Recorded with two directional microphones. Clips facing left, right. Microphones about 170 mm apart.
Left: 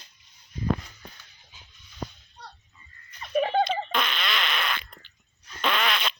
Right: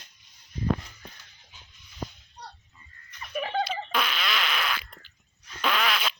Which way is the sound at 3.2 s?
30° left (ahead or behind).